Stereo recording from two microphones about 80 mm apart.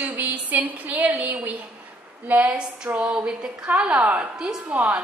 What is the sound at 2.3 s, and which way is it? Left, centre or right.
A woman's voice, centre.